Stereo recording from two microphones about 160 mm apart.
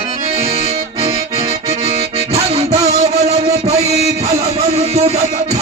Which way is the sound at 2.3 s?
40° right (ahead or behind).